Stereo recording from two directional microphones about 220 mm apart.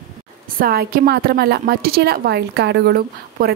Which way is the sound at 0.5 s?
45° right (ahead or behind).